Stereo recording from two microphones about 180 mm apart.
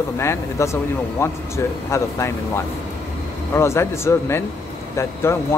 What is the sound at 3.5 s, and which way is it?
Speech, 15° left (ahead or behind).